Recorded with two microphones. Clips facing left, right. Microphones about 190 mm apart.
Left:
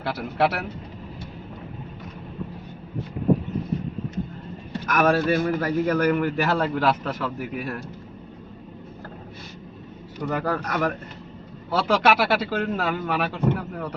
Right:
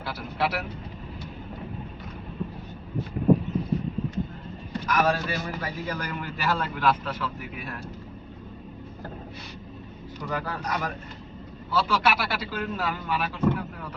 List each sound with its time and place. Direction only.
0.0 s speech: 60° left (ahead or behind)
4.9 s a man's voice: 55° left (ahead or behind)
10.2 s a man's voice: 50° left (ahead or behind)